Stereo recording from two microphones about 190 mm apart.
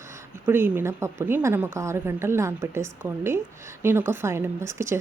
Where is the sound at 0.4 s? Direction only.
10° right (ahead or behind).